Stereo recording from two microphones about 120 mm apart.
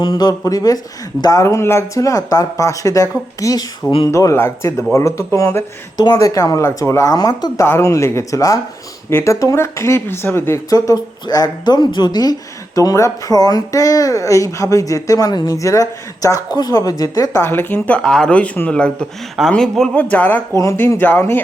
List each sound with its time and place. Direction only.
0.0 s speech: 35° left (ahead or behind); by 20.4 s 15° left (ahead or behind)
20.6 s speech: 25° left (ahead or behind)